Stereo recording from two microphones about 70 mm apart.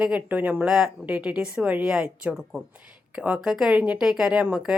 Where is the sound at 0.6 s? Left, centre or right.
Centre.